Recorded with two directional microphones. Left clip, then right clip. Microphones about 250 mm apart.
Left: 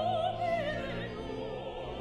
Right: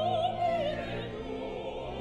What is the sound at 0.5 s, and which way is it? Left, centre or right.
Opera, centre.